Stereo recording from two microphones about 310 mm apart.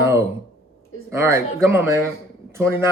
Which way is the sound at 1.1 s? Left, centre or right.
Centre.